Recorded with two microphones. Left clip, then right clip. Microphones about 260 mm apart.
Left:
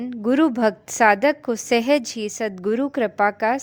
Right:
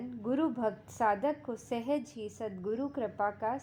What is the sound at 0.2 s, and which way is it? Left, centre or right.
A woman's voice, left.